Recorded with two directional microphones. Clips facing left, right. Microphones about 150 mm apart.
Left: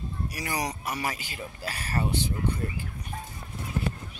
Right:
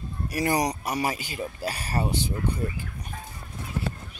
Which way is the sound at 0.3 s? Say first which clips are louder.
Right 9 dB; 45° right (ahead or behind).